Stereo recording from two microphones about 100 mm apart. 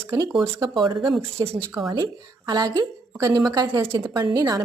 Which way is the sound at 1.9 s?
40° right (ahead or behind).